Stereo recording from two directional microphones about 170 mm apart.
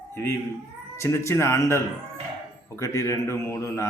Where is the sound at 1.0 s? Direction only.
15° left (ahead or behind).